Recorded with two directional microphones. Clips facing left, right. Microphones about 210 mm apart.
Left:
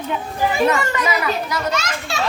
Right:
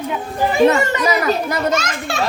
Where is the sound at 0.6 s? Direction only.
25° right (ahead or behind).